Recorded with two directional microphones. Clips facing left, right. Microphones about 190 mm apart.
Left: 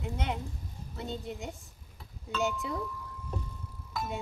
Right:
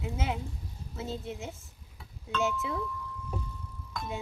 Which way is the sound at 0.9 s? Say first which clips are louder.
Right 1 dB; centre (ahead or behind).